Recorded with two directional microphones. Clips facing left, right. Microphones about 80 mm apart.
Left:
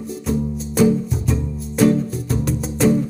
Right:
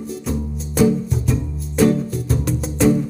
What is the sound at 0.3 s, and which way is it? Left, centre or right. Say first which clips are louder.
Music: left 6 dB; centre.